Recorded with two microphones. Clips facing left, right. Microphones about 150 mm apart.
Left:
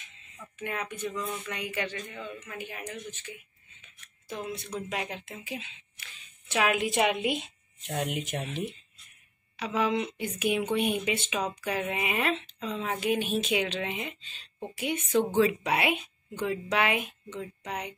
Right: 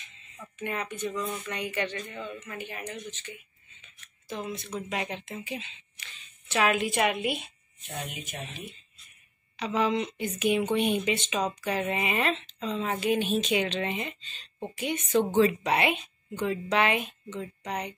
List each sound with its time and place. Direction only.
0.6 s speech: 5° left (ahead or behind); by 7.5 s 20° left (ahead or behind)
7.8 s speech: 70° left (ahead or behind)
9.6 s speech: 5° left (ahead or behind)